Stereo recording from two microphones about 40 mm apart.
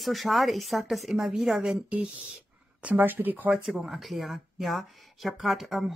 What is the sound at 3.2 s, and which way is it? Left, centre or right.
Speech, right.